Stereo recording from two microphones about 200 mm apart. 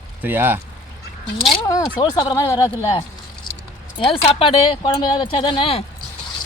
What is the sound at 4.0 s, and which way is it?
Speech, 25° left (ahead or behind).